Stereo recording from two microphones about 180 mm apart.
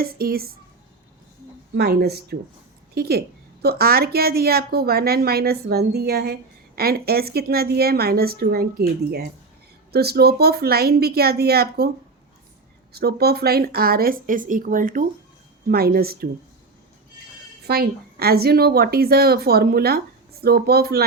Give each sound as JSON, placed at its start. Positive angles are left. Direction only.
{"t": 0.0, "sound": "a woman's voice", "side_deg": -55}
{"t": 1.7, "sound": "a woman's voice", "side_deg": -60}
{"t": 12.9, "sound": "a woman's voice", "side_deg": -60}
{"t": 17.7, "sound": "a woman's voice", "side_deg": -60}